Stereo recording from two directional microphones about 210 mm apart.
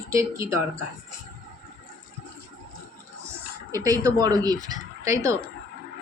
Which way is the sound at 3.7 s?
15° right (ahead or behind).